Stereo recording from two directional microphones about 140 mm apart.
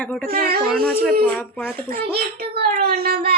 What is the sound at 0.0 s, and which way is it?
Speech, 10° left (ahead or behind).